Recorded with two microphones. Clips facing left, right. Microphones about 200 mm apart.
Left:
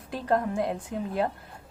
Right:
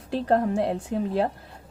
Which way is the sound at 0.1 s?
35° right (ahead or behind).